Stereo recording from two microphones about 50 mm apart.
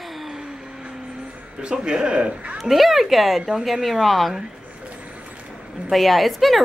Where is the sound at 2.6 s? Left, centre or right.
Centre.